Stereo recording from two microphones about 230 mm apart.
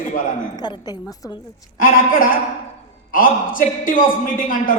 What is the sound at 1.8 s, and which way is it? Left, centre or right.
Speech, left.